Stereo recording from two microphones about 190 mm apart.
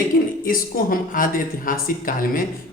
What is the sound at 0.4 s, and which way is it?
Speech, 45° left (ahead or behind).